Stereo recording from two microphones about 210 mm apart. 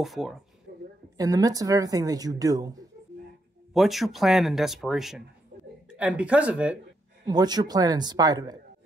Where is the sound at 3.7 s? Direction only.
Centre (ahead or behind).